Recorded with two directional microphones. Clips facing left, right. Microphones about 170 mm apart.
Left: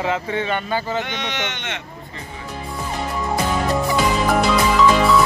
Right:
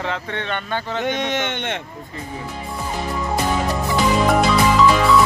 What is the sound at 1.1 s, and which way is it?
Speech, 45° right (ahead or behind).